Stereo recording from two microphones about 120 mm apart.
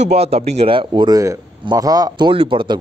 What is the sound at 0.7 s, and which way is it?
Speech, 45° right (ahead or behind).